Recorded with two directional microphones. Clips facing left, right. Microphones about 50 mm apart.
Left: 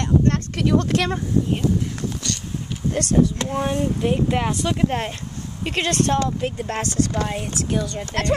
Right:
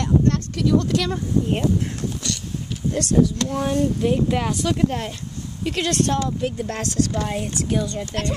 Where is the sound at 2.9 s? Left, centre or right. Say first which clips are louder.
Even; left.